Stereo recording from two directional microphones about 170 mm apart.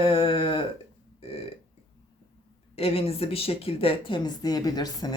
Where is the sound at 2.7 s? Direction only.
35° left (ahead or behind).